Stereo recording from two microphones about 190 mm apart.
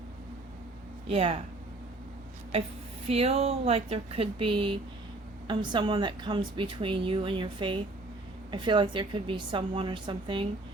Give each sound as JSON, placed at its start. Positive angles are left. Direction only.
{"t": 1.0, "sound": "a woman's voice", "side_deg": -30}
{"t": 3.1, "sound": "a woman's voice", "side_deg": -30}